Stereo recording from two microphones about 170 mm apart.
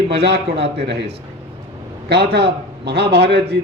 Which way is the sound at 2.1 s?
75° right (ahead or behind).